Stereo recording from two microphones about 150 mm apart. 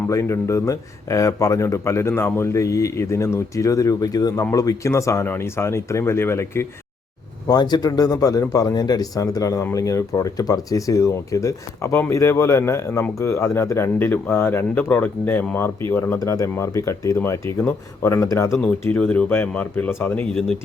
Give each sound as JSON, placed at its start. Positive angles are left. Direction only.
{"t": 0.1, "sound": "a man's voice", "side_deg": 20}
{"t": 7.4, "sound": "a man's voice", "side_deg": 25}
{"t": 18.5, "sound": "speech", "side_deg": 10}